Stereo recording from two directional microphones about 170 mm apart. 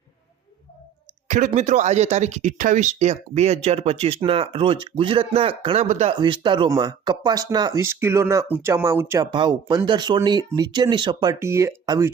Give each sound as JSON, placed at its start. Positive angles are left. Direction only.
{"t": 1.5, "sound": "speech", "side_deg": -45}
{"t": 6.1, "sound": "speech", "side_deg": -30}